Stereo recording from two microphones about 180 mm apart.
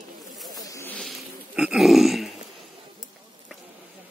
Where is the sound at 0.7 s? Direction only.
15° left (ahead or behind).